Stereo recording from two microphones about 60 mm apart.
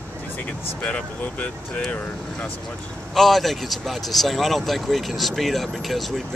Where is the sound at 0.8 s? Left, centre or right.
Left.